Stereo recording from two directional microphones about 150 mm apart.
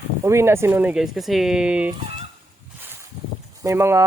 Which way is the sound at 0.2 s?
15° right (ahead or behind).